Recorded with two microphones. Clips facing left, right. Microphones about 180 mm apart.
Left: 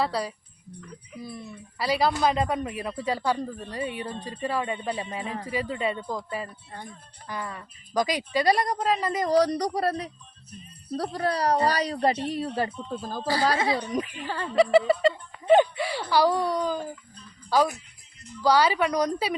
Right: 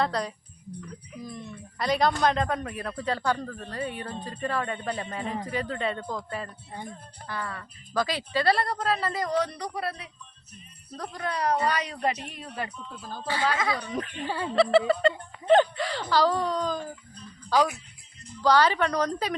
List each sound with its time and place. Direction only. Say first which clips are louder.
0.0 s speech: even; 5° left (ahead or behind)
9.2 s a woman's voice: left 6 dB; 35° left (ahead or behind)
13.9 s speech: left 3 dB; 5° left (ahead or behind)
14.3 s speech: right 1 dB; 15° right (ahead or behind)
14.5 s speech: left 2 dB; 10° left (ahead or behind)
18.4 s speech: even; 10° left (ahead or behind)